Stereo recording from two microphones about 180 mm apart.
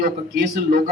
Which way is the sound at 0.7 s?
60° right (ahead or behind).